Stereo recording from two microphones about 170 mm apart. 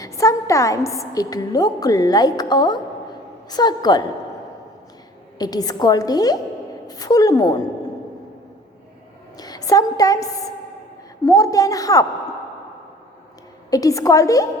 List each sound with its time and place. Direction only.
0.0 s a woman's voice: 20° left (ahead or behind)
5.4 s a woman's voice: 25° left (ahead or behind)
9.4 s a woman's voice: 20° left (ahead or behind)
11.3 s a woman's voice: 20° left (ahead or behind)
13.7 s a woman's voice: 20° left (ahead or behind)